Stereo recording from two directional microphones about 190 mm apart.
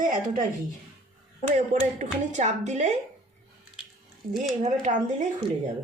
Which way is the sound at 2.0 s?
40° right (ahead or behind).